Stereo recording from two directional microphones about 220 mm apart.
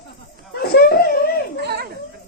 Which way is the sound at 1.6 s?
45° right (ahead or behind).